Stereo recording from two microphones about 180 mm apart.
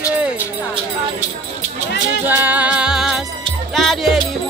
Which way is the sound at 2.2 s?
10° right (ahead or behind).